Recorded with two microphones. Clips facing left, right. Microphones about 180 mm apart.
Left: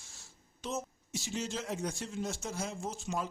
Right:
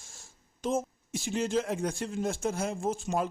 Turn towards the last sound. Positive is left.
turn(degrees=-55)  # may be behind; listen again after turning